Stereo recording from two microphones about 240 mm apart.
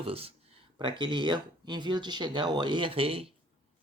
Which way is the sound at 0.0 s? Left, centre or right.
Right.